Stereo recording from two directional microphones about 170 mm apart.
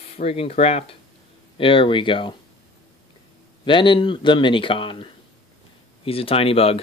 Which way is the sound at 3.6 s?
30° left (ahead or behind).